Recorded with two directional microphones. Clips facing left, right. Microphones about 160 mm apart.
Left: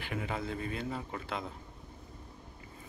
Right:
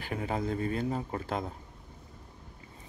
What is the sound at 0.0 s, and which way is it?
A man's voice, 35° right (ahead or behind).